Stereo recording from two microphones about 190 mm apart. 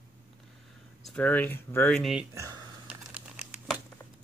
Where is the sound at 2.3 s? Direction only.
15° right (ahead or behind).